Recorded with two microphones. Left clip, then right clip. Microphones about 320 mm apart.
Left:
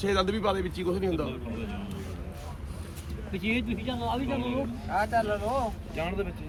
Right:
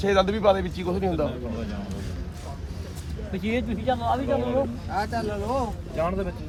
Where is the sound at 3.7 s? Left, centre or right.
Right.